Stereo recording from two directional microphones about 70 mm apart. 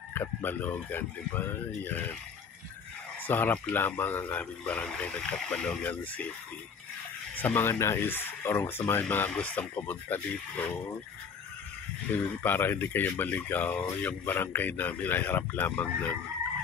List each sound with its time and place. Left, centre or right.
0.1 s speech: left
3.3 s speech: left
7.3 s speech: left
9.3 s speech: left
12.2 s speech: left